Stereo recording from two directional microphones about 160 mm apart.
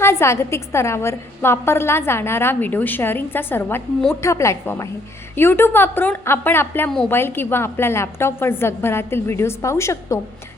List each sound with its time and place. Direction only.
0.0 s a woman's voice: 15° left (ahead or behind)